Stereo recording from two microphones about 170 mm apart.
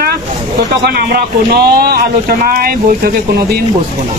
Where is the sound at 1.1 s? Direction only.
65° right (ahead or behind).